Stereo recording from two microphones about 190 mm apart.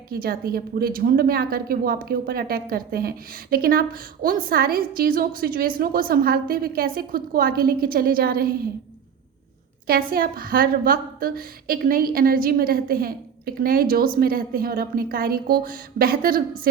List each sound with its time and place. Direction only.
0.1 s a woman's voice: 50° right (ahead or behind)
9.8 s a woman's voice: 50° right (ahead or behind)